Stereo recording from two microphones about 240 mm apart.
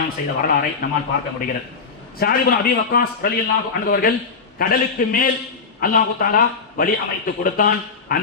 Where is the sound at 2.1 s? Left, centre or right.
Left.